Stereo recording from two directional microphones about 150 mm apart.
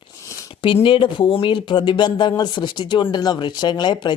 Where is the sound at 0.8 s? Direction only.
35° left (ahead or behind).